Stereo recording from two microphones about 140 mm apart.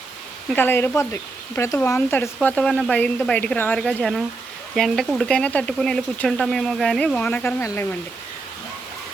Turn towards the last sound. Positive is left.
turn(degrees=20)  # may be behind; listen again after turning